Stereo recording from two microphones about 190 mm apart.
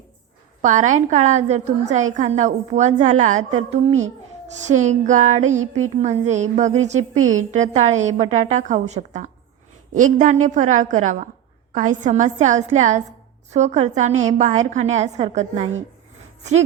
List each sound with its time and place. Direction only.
0.6 s a woman's voice: 40° right (ahead or behind)